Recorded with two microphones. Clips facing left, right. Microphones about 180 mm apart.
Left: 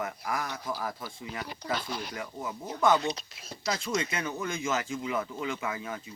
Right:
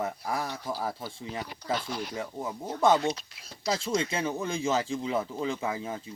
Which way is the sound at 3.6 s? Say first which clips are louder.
Right 3 dB; 30° right (ahead or behind).